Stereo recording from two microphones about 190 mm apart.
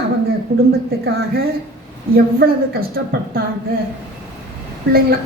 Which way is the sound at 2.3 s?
50° right (ahead or behind).